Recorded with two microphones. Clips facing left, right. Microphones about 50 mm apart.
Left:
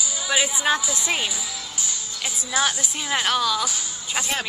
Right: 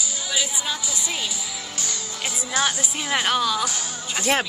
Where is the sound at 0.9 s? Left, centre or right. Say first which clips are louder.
Left 4 dB; left.